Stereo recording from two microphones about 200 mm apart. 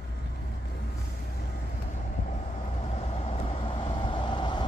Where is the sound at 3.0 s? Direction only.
25° left (ahead or behind).